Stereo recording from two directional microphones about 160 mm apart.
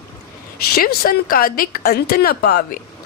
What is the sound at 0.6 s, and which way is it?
Speech, 75° left (ahead or behind).